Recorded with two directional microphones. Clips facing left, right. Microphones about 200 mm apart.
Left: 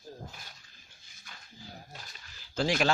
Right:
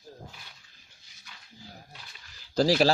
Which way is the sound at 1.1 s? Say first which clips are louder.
Left 1 dB; 50° left (ahead or behind).